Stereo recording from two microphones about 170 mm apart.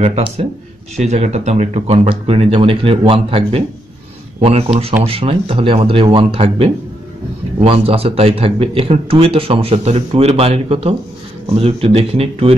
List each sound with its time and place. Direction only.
0.0 s a man's voice: 35° right (ahead or behind)